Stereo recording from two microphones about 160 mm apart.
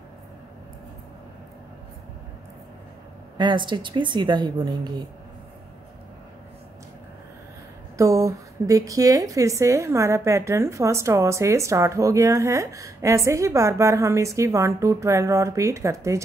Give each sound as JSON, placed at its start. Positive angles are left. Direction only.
{"t": 3.3, "sound": "a woman's voice", "side_deg": -30}
{"t": 8.0, "sound": "a woman's voice", "side_deg": -20}